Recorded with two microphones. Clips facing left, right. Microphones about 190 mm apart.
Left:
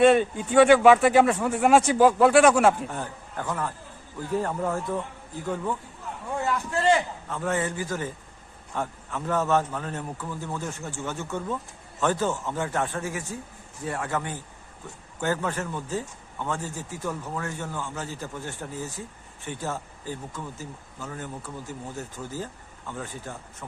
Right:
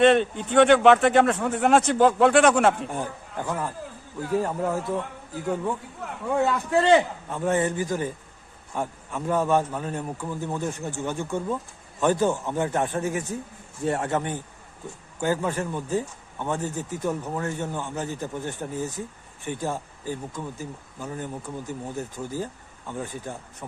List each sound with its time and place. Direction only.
0.0 s speech: 5° left (ahead or behind)
2.9 s a man's voice: 15° right (ahead or behind)
6.3 s a man's voice: 65° right (ahead or behind)
7.3 s speech: 20° right (ahead or behind)